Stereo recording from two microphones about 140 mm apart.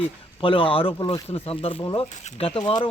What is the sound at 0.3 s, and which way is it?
Speech, 35° left (ahead or behind).